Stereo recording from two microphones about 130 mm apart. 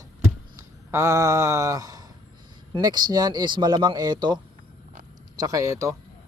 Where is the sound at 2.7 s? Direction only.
35° right (ahead or behind).